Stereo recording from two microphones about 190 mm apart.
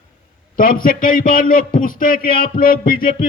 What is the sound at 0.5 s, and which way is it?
A man's voice, 45° left (ahead or behind).